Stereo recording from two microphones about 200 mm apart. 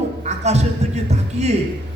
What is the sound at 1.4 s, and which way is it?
Speech, 35° right (ahead or behind).